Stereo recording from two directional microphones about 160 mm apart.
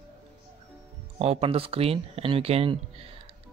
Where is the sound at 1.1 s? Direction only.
40° right (ahead or behind).